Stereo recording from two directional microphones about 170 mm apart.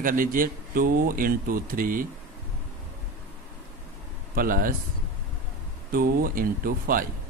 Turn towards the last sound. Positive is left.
turn(degrees=-55)  # may be behind; listen again after turning